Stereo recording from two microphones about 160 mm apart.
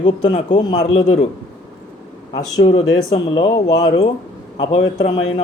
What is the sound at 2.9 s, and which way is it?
A man's voice, 25° left (ahead or behind).